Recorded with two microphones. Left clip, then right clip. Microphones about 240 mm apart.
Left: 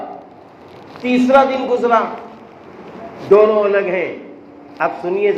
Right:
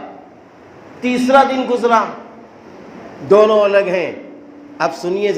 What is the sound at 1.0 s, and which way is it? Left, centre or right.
A man's voice, right.